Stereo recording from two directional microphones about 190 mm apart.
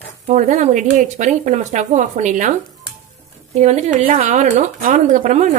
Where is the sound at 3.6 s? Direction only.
35° right (ahead or behind).